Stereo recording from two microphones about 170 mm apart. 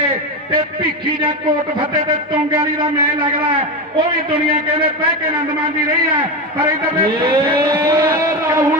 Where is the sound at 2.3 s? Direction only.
30° right (ahead or behind).